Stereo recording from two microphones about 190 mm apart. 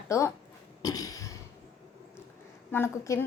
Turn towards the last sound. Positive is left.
turn(degrees=15)  # may be behind; listen again after turning